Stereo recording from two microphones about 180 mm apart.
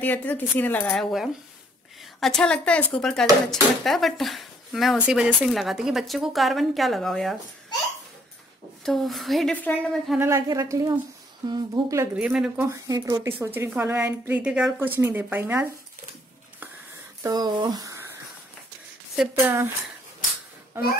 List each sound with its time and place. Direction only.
0.0 s speech: 10° left (ahead or behind)
8.8 s speech: centre (ahead or behind)
10.1 s a woman's voice: 15° right (ahead or behind)
12.2 s speech: 5° right (ahead or behind)
12.6 s a woman's voice: 20° right (ahead or behind)
17.2 s speech: 20° right (ahead or behind)
19.1 s a woman's voice: 10° right (ahead or behind)